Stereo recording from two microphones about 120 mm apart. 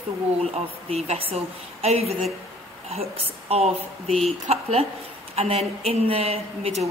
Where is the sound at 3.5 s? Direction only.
60° right (ahead or behind).